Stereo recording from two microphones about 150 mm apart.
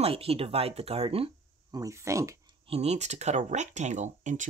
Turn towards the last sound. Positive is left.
turn(degrees=-55)  # may be behind; listen again after turning